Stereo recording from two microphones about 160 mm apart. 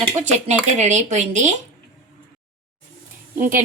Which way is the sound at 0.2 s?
45° right (ahead or behind).